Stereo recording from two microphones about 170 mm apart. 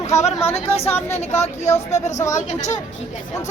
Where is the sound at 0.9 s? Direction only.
10° left (ahead or behind).